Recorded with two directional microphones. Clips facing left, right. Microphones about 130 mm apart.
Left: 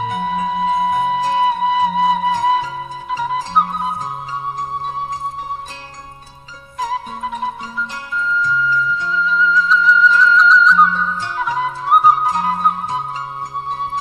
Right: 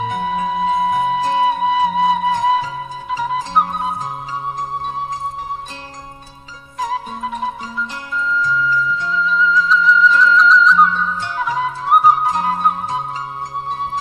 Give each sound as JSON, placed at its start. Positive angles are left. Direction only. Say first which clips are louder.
{"t": 0.0, "sound": "music", "louder": "even", "side_deg": 0}
{"t": 6.8, "sound": "flute", "louder": "even", "side_deg": 0}